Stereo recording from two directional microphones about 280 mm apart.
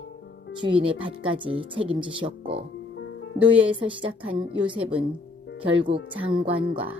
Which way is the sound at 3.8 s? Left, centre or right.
Centre.